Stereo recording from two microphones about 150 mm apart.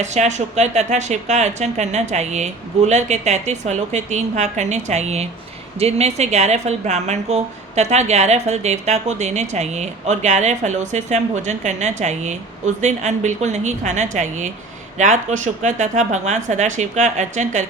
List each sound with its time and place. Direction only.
0.0 s a woman's voice: 50° right (ahead or behind)